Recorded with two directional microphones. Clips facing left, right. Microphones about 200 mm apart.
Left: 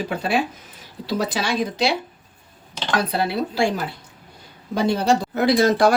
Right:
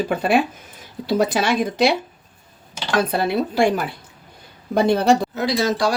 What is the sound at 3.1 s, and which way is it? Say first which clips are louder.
Speech: right 2 dB; 50° right (ahead or behind).